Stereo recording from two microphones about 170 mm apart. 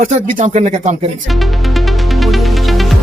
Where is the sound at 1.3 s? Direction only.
Centre (ahead or behind).